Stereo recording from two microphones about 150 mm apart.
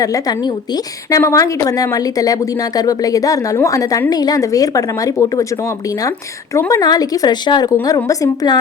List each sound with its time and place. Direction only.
0.0 s a woman's voice: 25° left (ahead or behind)
6.5 s a woman's voice: 20° left (ahead or behind)